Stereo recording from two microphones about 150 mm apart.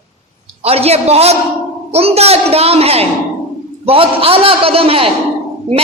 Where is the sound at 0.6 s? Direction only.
40° right (ahead or behind).